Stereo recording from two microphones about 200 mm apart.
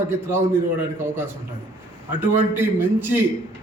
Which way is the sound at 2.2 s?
10° right (ahead or behind).